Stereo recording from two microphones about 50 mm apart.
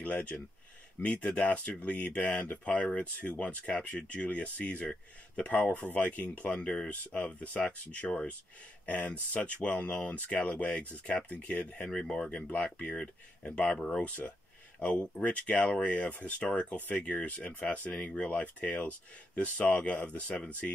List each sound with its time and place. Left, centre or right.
0.0 s speech: left
11.9 s speech: centre
12.8 s speech: centre
13.5 s speech: left
13.7 s speech: centre
14.0 s speech: left